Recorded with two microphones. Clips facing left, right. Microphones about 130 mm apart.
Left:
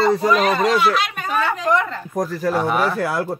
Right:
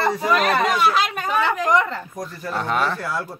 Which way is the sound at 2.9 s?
90° left.